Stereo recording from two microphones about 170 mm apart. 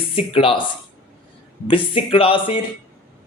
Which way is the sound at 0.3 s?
30° left (ahead or behind).